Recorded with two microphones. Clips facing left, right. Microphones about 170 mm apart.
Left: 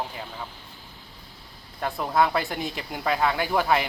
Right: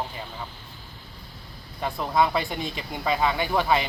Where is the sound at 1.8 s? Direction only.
Centre (ahead or behind).